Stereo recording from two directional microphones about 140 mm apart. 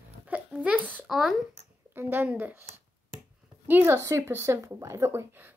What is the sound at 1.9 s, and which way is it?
A woman's voice, 15° right (ahead or behind).